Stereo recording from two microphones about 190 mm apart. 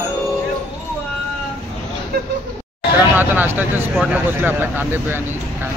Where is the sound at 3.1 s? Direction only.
10° right (ahead or behind).